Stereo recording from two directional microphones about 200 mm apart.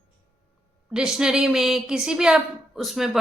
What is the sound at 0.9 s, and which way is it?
A woman's voice, 5° right (ahead or behind).